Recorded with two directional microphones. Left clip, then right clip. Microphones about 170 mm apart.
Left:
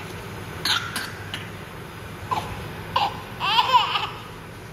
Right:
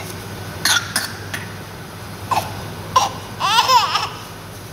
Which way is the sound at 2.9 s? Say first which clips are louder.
Right 6 dB; 20° right (ahead or behind).